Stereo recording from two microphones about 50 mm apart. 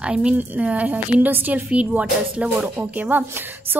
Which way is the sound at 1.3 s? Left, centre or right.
Right.